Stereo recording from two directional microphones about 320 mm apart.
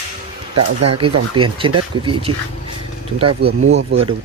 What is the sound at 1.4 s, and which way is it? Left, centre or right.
Speech, centre.